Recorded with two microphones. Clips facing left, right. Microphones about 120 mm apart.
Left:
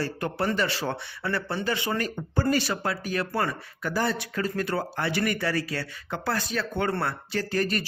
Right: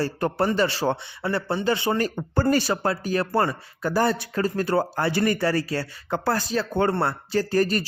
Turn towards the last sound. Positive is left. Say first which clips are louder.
# right 5 dB
turn(degrees=-35)  # may be behind; listen again after turning